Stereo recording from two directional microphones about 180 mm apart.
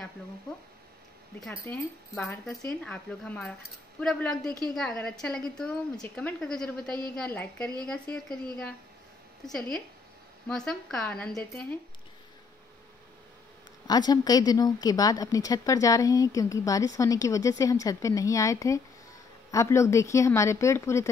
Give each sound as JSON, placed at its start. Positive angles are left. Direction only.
{"t": 1.6, "sound": "speech", "side_deg": 5}
{"t": 9.5, "sound": "speech", "side_deg": 5}
{"t": 13.8, "sound": "a woman's voice", "side_deg": 20}